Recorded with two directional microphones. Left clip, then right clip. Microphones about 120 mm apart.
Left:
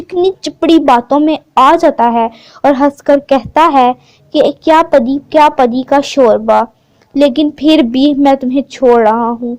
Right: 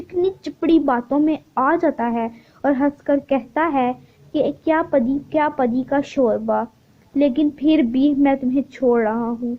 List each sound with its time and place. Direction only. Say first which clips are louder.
0.1 s a woman's voice: left 9 dB; 40° left (ahead or behind)